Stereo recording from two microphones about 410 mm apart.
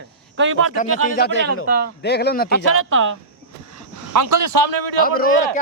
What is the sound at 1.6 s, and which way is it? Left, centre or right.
Speech, right.